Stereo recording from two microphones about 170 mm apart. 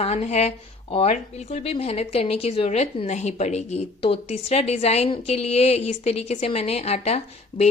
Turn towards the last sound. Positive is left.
turn(degrees=40)  # may be behind; listen again after turning